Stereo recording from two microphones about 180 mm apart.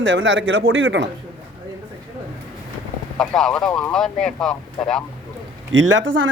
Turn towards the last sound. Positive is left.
turn(degrees=-90)